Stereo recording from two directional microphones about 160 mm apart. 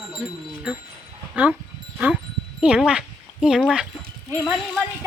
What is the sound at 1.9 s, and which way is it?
Wind chime, 10° right (ahead or behind).